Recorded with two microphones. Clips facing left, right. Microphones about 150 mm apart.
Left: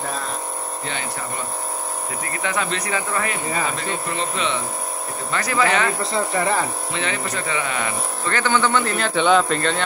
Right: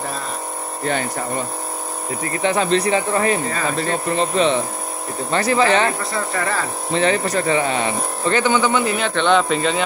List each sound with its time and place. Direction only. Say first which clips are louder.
2.4 s speech: right 8 dB; 30° right (ahead or behind)
6.1 s speech: left 2 dB; 20° left (ahead or behind)
6.9 s speech: right 8 dB; 35° right (ahead or behind); by 9.0 s 10° right (ahead or behind)
9.0 s speech: left 2 dB; 5° left (ahead or behind)